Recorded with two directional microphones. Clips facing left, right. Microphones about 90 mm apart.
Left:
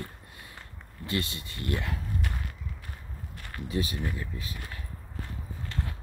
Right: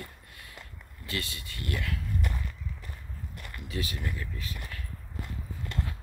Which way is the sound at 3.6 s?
25° left (ahead or behind).